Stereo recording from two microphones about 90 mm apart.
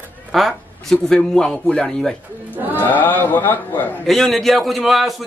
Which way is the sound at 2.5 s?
20° right (ahead or behind).